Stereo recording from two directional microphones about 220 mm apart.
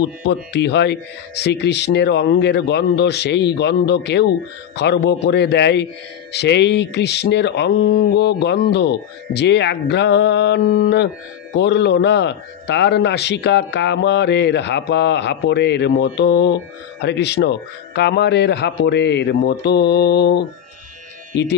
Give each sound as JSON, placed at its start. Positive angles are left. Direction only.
{"t": 0.2, "sound": "a man's voice", "side_deg": 50}